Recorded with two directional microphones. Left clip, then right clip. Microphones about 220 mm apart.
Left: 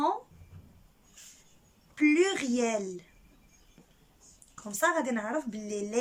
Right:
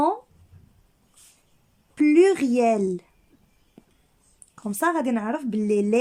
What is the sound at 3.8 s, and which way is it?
Whispering, 35° right (ahead or behind).